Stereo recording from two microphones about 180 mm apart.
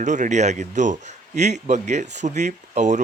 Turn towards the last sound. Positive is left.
turn(degrees=-40)  # may be behind; listen again after turning